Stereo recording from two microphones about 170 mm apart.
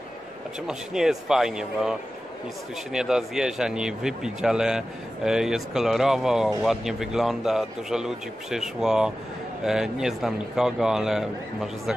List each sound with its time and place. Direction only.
0.7 s speech: 5° right (ahead or behind)